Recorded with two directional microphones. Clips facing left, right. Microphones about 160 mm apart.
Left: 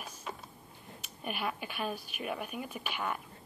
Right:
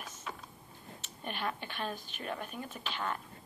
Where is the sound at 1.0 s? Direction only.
10° left (ahead or behind).